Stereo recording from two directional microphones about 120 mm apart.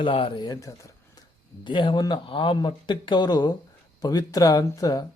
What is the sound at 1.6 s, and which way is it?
A man's voice, 40° left (ahead or behind).